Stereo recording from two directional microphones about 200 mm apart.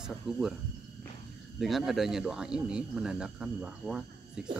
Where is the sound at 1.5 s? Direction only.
Centre (ahead or behind).